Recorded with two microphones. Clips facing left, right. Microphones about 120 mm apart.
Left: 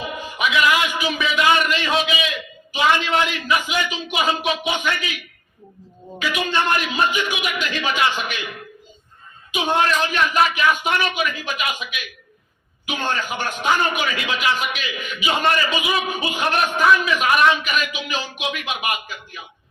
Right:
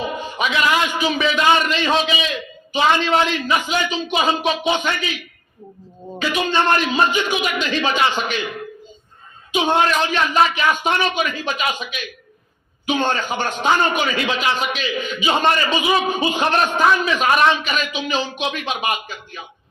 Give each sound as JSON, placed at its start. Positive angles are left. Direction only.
{"t": 0.0, "sound": "music", "side_deg": -30}
{"t": 1.4, "sound": "a man's voice", "side_deg": -30}
{"t": 6.1, "sound": "a man's voice", "side_deg": -30}